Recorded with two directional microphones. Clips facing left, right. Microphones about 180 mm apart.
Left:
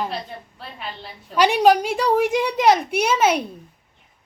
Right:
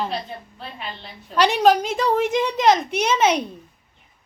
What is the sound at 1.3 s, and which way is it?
A woman's voice, 10° left (ahead or behind).